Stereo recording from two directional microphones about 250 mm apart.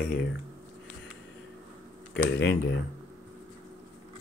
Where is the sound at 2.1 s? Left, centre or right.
Left.